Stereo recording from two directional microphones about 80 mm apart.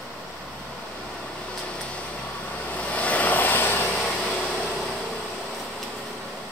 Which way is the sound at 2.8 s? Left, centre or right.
Centre.